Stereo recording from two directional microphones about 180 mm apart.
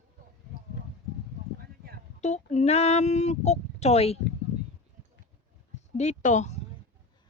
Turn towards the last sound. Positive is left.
turn(degrees=40)  # may be behind; listen again after turning